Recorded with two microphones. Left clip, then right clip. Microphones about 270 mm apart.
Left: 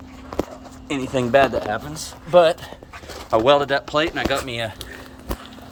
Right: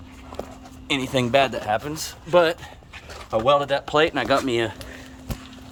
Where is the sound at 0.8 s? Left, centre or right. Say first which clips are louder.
Even; right.